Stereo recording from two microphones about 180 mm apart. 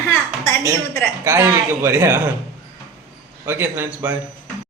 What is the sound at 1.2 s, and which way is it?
Speech, 15° right (ahead or behind).